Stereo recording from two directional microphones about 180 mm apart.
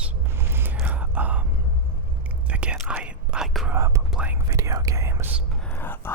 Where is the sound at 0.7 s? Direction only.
5° right (ahead or behind).